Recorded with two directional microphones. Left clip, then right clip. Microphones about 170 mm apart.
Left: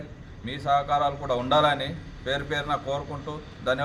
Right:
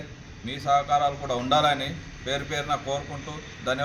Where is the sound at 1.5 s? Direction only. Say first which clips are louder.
Even; 40° left (ahead or behind).